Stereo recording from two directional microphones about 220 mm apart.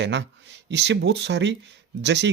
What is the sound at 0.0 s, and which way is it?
Speech, 55° right (ahead or behind).